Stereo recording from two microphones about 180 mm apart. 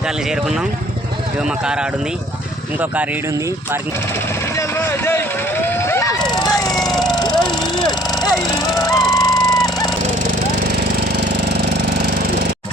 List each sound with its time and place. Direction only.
1.5 s speech: 5° right (ahead or behind)
4.5 s speech: 15° left (ahead or behind)
5.6 s vehicle: 15° left (ahead or behind)
6.3 s a sound: 20° left (ahead or behind)
6.7 s vehicle: centre (ahead or behind)
7.4 s a sound: 25° left (ahead or behind)
8.7 s music: 20° left (ahead or behind)
9.5 s dog: 20° left (ahead or behind)